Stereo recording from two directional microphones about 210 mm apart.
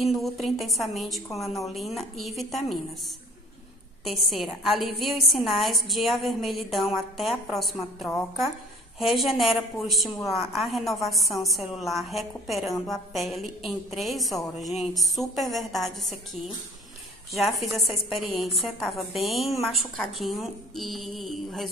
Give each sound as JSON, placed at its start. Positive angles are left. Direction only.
{"t": 0.0, "sound": "a woman's voice", "side_deg": 0}
{"t": 4.0, "sound": "a woman's voice", "side_deg": 0}
{"t": 12.7, "sound": "a woman's voice", "side_deg": 15}
{"t": 13.1, "sound": "a woman's voice", "side_deg": 0}
{"t": 17.6, "sound": "a woman's voice", "side_deg": 0}